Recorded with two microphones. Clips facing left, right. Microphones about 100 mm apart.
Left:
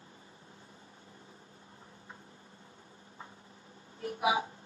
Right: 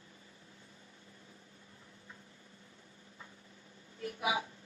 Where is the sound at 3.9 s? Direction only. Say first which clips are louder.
Left 5 dB; 35° left (ahead or behind).